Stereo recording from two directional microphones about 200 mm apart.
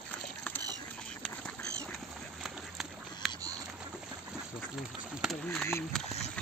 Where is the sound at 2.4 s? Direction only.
Centre (ahead or behind).